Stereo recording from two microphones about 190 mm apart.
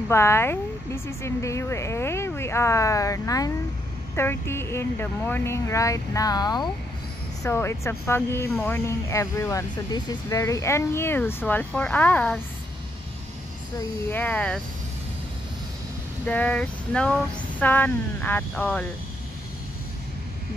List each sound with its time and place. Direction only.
0.1 s speech: 15° left (ahead or behind)
14.1 s speech: 10° left (ahead or behind)
16.3 s speech: 5° left (ahead or behind)